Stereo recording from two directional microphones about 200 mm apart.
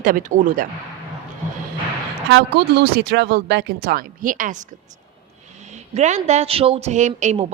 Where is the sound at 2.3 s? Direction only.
55° right (ahead or behind).